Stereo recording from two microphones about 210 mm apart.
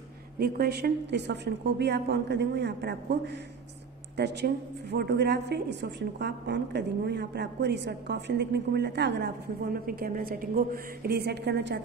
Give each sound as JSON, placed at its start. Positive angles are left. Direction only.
{"t": 0.4, "sound": "a woman's voice", "side_deg": -50}
{"t": 4.9, "sound": "a woman's voice", "side_deg": -50}